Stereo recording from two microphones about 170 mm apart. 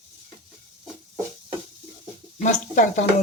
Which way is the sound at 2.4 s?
45° left (ahead or behind).